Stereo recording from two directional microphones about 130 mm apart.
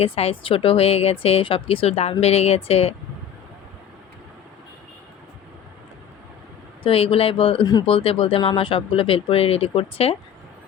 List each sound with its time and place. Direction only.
0.0 s speech: 45° left (ahead or behind)
6.8 s speech: 45° left (ahead or behind)